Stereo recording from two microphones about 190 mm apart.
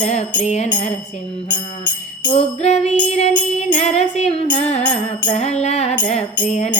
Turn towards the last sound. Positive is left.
turn(degrees=35)  # may be behind; listen again after turning